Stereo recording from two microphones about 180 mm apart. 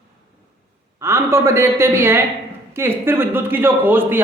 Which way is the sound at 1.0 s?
15° right (ahead or behind).